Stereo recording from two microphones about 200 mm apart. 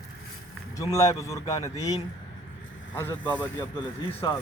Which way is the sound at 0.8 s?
15° left (ahead or behind).